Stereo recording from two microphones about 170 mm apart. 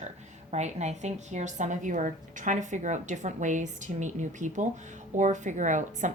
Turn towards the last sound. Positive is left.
turn(degrees=-45)  # may be behind; listen again after turning